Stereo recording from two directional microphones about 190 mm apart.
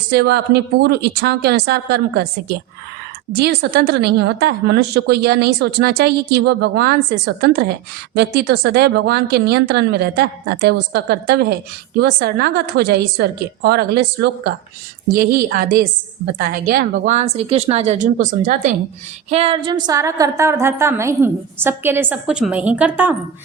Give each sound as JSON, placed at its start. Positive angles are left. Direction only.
{"t": 0.1, "sound": "a woman's voice", "side_deg": -60}
{"t": 17.2, "sound": "speech", "side_deg": -35}
{"t": 19.3, "sound": "a woman's voice", "side_deg": -30}